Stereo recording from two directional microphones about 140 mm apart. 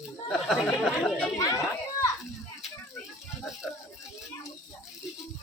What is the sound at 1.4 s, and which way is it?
Speech, 25° left (ahead or behind).